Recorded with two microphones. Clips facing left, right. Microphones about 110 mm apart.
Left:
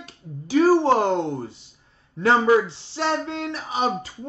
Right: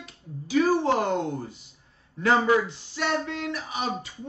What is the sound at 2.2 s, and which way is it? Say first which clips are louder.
Speech: left 4 dB; 30° left (ahead or behind).